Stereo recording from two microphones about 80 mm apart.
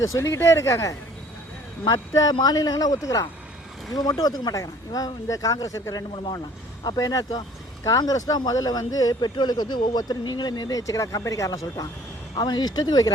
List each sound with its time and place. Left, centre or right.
0.0 s speech: left
9.3 s speech: left
12.4 s speech: left